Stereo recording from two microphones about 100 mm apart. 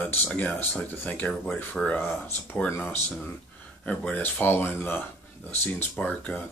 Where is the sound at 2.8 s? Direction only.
15° left (ahead or behind).